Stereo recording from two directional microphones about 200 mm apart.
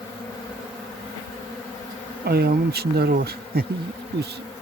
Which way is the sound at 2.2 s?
50° right (ahead or behind).